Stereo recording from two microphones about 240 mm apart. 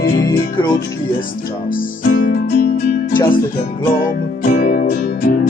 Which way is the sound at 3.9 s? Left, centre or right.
Left.